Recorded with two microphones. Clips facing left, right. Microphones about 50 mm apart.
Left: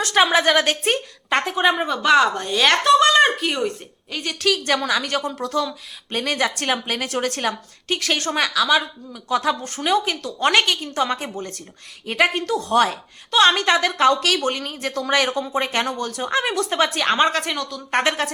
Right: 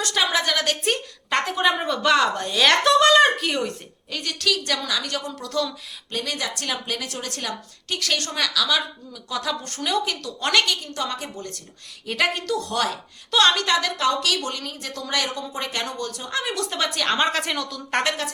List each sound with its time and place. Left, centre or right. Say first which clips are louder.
0.0 s speech: left 6 dB; left
1.3 s speech: left 2 dB; centre
4.1 s speech: left 2 dB; centre
4.4 s speech: left 5 dB; left
5.5 s speech: left 1 dB; centre
6.1 s speech: left 6 dB; left
17.2 s speech: left 2 dB; centre